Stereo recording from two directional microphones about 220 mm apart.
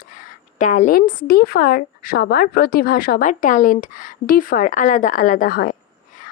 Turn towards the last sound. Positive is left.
turn(degrees=40)  # may be behind; listen again after turning